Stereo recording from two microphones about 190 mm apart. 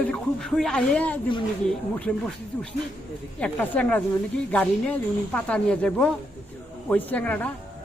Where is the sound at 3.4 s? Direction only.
10° left (ahead or behind).